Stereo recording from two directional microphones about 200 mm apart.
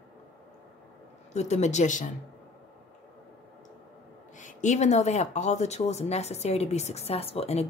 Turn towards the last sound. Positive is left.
turn(degrees=30)  # may be behind; listen again after turning